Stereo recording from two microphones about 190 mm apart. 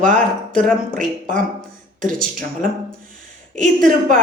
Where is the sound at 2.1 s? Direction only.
5° left (ahead or behind).